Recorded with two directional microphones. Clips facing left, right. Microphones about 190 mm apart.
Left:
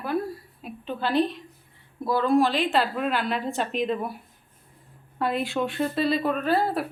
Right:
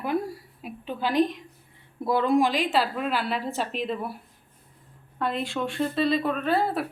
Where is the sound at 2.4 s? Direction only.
10° right (ahead or behind).